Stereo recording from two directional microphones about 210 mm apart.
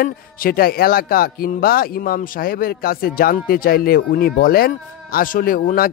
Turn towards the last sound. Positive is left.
turn(degrees=45)  # may be behind; listen again after turning